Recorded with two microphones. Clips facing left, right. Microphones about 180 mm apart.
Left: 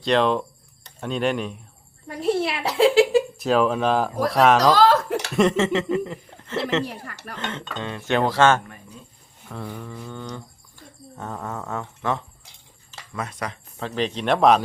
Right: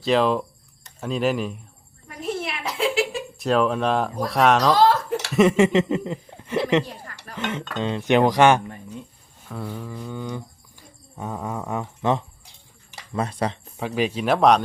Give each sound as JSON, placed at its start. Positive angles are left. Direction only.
{"t": 0.0, "sound": "speech", "side_deg": 0}
{"t": 2.0, "sound": "a sound", "side_deg": 30}
{"t": 3.3, "sound": "speech", "side_deg": 0}
{"t": 9.5, "sound": "speech", "side_deg": -5}
{"t": 13.1, "sound": "speech", "side_deg": -30}
{"t": 13.7, "sound": "speech", "side_deg": -10}